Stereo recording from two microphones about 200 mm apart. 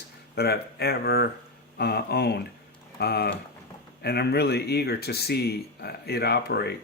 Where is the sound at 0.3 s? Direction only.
50° left (ahead or behind).